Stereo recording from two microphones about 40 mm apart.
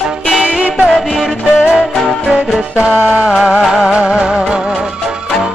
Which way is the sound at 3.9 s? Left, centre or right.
Centre.